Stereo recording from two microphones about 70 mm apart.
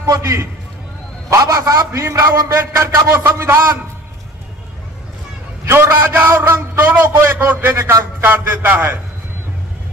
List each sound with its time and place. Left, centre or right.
0.0 s a man's voice: right
1.9 s a man's voice: right
5.7 s a man's voice: right
8.3 s a man's voice: right